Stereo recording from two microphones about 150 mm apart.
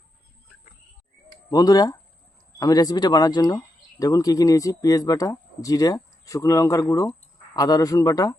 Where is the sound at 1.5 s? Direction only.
25° left (ahead or behind).